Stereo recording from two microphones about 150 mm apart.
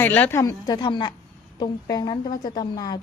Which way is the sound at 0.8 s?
30° left (ahead or behind).